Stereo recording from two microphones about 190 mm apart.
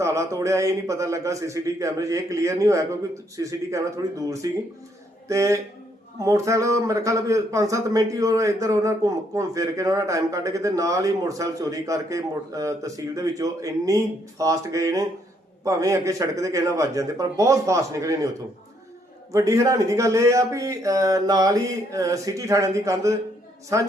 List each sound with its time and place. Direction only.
0.0 s a man's voice: 15° right (ahead or behind)
19.3 s a man's voice: 15° right (ahead or behind)